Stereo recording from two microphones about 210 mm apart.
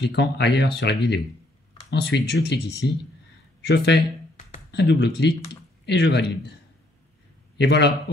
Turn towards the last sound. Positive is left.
turn(degrees=55)  # may be behind; listen again after turning